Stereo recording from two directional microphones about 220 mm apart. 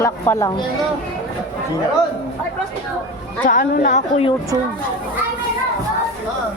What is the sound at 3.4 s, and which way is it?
Speech, 40° left (ahead or behind).